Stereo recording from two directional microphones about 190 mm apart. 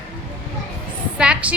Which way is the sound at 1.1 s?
5° right (ahead or behind).